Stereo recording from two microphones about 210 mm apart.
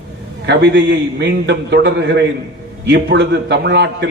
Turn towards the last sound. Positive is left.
turn(degrees=-55)  # may be behind; listen again after turning